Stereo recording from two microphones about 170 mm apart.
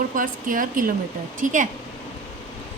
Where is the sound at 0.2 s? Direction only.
55° right (ahead or behind).